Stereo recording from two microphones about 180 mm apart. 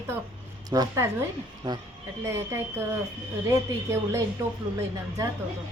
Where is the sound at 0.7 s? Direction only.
20° right (ahead or behind).